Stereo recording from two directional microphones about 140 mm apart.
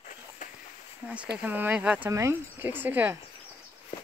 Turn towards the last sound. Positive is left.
turn(degrees=-15)  # may be behind; listen again after turning